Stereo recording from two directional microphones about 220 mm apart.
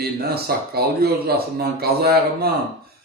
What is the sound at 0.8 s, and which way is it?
A man's voice, 45° right (ahead or behind).